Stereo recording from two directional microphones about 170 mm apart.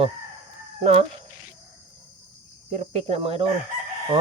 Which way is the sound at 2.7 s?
40° right (ahead or behind).